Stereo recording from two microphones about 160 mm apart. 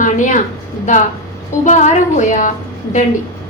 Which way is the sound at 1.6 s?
50° left (ahead or behind).